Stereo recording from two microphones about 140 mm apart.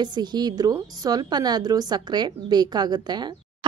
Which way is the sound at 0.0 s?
30° right (ahead or behind).